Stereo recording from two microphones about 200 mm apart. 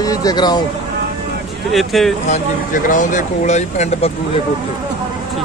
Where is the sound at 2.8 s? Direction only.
40° left (ahead or behind).